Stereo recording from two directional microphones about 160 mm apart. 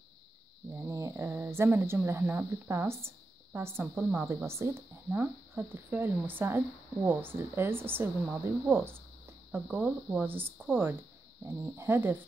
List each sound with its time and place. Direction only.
0.7 s speech: 20° right (ahead or behind)